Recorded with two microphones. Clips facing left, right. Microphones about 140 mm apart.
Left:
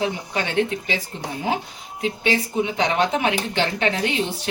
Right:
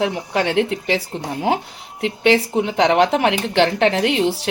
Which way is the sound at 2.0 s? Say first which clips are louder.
Right 6 dB; 75° right (ahead or behind).